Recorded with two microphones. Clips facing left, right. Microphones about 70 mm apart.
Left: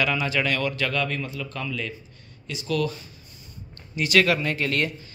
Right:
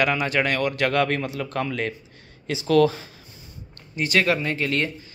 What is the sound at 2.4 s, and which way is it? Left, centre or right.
Speech, right.